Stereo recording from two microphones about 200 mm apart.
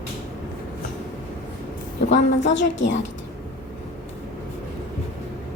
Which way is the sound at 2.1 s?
65° left (ahead or behind).